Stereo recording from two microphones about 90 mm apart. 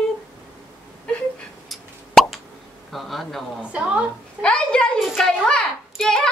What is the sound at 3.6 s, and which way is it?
Speech, 15° right (ahead or behind).